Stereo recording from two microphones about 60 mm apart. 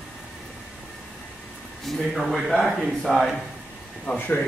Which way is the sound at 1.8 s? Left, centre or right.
Centre.